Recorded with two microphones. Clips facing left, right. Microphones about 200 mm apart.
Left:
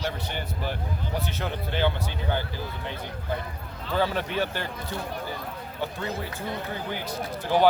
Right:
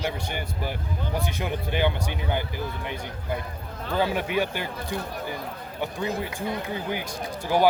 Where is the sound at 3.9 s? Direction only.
15° right (ahead or behind).